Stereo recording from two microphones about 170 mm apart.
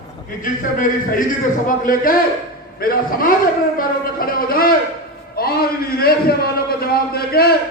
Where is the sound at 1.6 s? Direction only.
55° left (ahead or behind).